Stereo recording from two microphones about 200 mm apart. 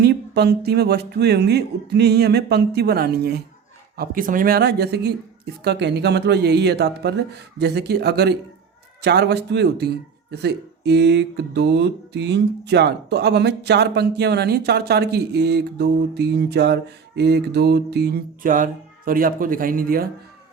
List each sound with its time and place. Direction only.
0.0 s speech: 55° right (ahead or behind)